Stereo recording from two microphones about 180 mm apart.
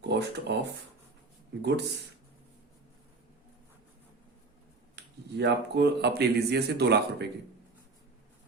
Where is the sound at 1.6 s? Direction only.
70° right (ahead or behind).